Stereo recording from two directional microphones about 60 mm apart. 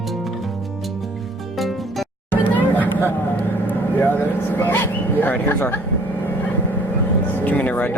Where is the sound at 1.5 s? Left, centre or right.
Centre.